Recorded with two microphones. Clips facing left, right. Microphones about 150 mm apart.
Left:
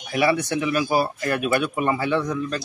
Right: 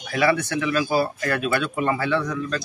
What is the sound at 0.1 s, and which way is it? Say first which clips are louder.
Speech: even; 15° left (ahead or behind).